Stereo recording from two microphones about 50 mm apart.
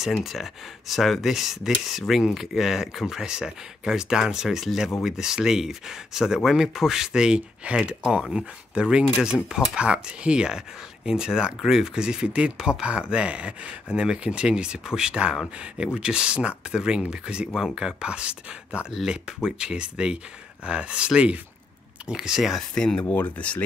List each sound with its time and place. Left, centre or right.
0.1 s speech: centre
22.6 s speech: centre
23.1 s speech: left